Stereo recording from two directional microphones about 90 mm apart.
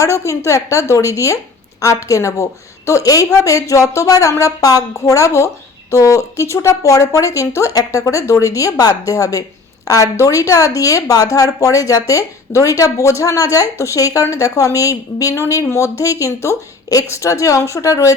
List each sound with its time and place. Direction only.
0.0 s speech: 35° left (ahead or behind)